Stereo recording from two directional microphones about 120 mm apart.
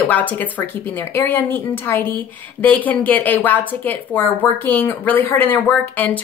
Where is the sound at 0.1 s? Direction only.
15° left (ahead or behind).